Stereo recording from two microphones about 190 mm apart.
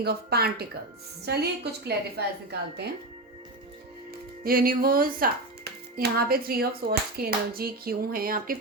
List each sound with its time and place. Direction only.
0.0 s a woman's voice: 55° right (ahead or behind)
4.4 s speech: 50° right (ahead or behind)